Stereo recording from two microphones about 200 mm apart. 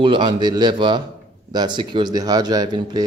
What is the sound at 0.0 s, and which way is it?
Speech, 25° right (ahead or behind).